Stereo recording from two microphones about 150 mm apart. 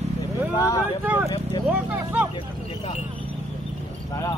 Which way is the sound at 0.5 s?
20° left (ahead or behind).